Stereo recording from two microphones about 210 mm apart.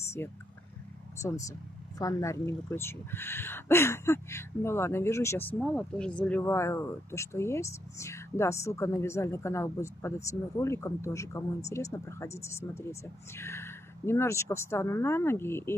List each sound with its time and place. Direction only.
0.2 s speech: 10° left (ahead or behind)